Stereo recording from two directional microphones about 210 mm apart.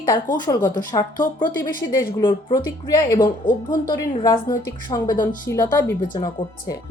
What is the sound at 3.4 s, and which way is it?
A woman's voice, 20° left (ahead or behind).